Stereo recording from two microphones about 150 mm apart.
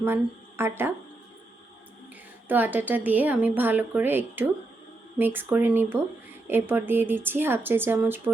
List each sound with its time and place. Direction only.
0.0 s a woman's voice: 15° right (ahead or behind)
2.5 s a woman's voice: 10° right (ahead or behind)